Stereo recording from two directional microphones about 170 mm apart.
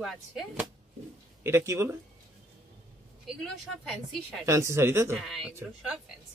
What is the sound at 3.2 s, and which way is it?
Speech, centre (ahead or behind).